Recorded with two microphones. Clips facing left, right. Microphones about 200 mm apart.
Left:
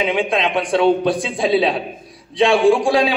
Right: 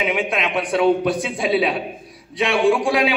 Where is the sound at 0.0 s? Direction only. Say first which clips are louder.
Left 3 dB; 30° left (ahead or behind).